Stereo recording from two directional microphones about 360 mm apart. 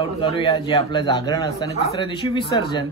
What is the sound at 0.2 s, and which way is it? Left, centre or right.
A man's voice, centre.